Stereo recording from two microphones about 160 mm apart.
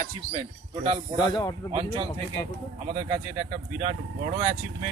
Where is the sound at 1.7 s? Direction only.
35° right (ahead or behind).